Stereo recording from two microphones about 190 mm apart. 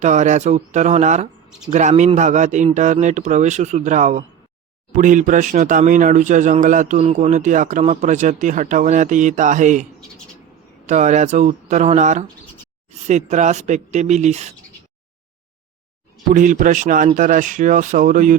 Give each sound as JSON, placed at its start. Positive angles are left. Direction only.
{"t": 0.0, "sound": "speech", "side_deg": -40}
{"t": 10.8, "sound": "speech", "side_deg": -40}
{"t": 16.3, "sound": "speech", "side_deg": -40}